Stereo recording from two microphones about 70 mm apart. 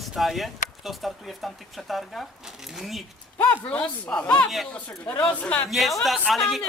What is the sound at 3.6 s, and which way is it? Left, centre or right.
Speech, centre.